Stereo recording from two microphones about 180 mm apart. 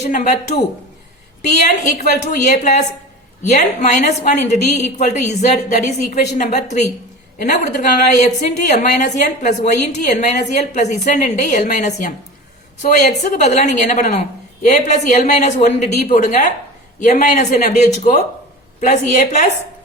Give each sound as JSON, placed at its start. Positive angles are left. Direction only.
{"t": 0.0, "sound": "a woman's voice", "side_deg": 40}